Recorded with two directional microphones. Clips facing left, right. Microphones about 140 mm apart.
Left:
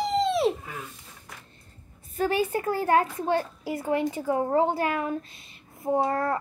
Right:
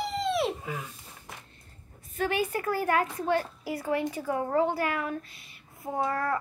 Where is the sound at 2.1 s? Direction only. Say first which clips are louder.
Left 3 dB; 35° left (ahead or behind).